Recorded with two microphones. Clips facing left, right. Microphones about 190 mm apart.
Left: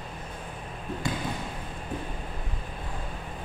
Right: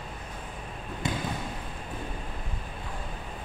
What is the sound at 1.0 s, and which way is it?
Basketball bounce, 20° right (ahead or behind).